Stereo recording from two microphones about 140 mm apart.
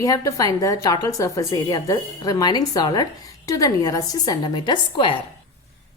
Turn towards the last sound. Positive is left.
turn(degrees=35)  # may be behind; listen again after turning